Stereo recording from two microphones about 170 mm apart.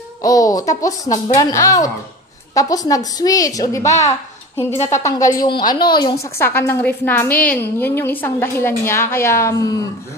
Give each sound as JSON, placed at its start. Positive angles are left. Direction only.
{"t": 0.2, "sound": "speech", "side_deg": 20}
{"t": 4.7, "sound": "a woman's voice", "side_deg": 40}
{"t": 5.0, "sound": "speech", "side_deg": 20}
{"t": 6.2, "sound": "a woman's voice", "side_deg": 15}